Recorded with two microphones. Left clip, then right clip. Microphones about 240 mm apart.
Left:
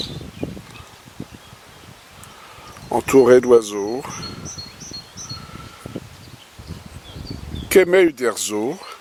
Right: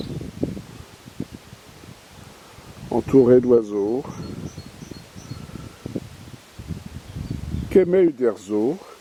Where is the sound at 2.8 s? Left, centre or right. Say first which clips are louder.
Left 3 dB; left.